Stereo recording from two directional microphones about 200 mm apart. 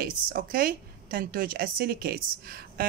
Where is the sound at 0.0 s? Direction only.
45° right (ahead or behind).